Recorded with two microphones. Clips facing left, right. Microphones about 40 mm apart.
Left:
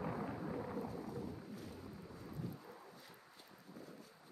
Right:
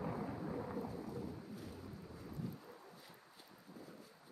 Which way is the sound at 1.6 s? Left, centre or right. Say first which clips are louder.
Even; centre.